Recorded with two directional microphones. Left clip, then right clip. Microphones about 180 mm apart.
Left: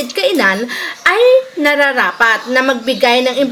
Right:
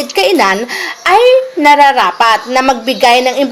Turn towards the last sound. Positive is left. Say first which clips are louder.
# right 3 dB
turn(degrees=-15)  # may be behind; listen again after turning